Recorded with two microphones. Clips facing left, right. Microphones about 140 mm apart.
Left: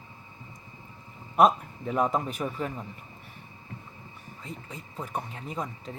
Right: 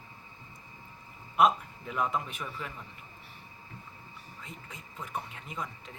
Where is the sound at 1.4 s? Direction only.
40° left (ahead or behind).